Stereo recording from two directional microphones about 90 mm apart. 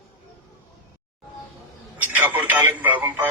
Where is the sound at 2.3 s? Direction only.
20° right (ahead or behind).